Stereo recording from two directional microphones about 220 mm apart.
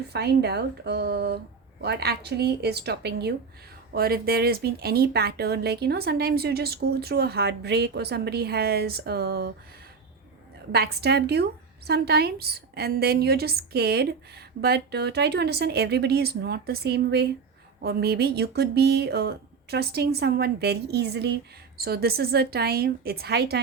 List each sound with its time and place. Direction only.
0.1 s speech: 45° right (ahead or behind)
10.7 s speech: 45° right (ahead or behind)